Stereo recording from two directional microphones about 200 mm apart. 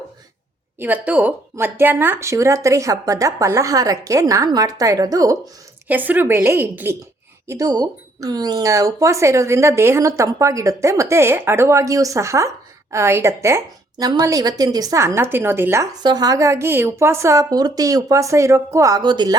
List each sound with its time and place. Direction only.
0.8 s speech: 10° right (ahead or behind)